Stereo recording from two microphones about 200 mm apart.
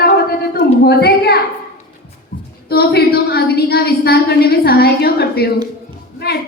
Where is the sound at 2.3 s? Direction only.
50° left (ahead or behind).